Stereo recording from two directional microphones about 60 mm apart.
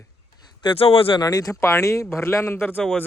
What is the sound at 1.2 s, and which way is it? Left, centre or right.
Speech, left.